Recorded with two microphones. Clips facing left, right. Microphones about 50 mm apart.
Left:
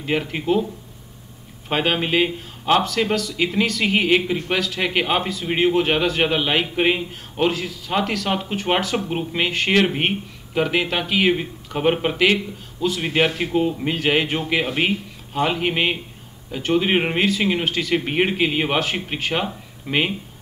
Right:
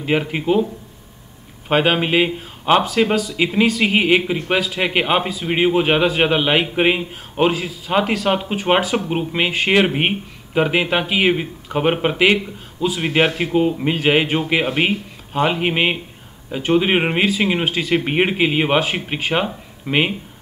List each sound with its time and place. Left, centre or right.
0.0 s speech: centre
1.7 s speech: centre